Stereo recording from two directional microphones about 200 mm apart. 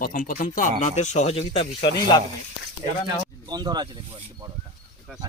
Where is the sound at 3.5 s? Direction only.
20° right (ahead or behind).